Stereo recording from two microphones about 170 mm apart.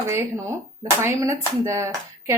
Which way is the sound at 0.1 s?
15° right (ahead or behind).